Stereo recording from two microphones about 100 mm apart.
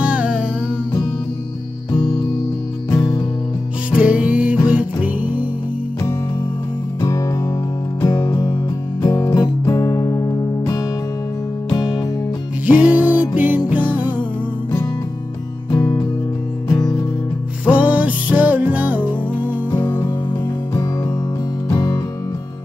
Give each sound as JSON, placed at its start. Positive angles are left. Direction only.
{"t": 0.0, "sound": "music", "side_deg": -10}
{"t": 2.9, "sound": "music", "side_deg": 30}
{"t": 3.9, "sound": "music", "side_deg": -10}
{"t": 7.0, "sound": "music", "side_deg": 35}
{"t": 12.6, "sound": "music", "side_deg": -15}
{"t": 15.7, "sound": "music", "side_deg": 35}
{"t": 17.6, "sound": "music", "side_deg": -15}
{"t": 19.7, "sound": "music", "side_deg": 50}
{"t": 21.7, "sound": "music", "side_deg": 30}